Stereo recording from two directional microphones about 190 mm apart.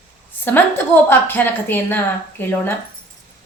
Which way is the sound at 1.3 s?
10° left (ahead or behind).